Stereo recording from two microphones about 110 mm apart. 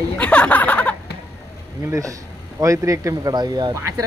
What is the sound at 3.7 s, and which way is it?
Speech, 30° right (ahead or behind).